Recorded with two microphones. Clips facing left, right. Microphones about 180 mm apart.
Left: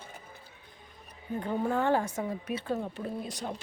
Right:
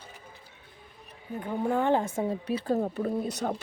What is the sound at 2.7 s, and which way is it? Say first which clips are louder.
Speech: right 7 dB; 45° right (ahead or behind).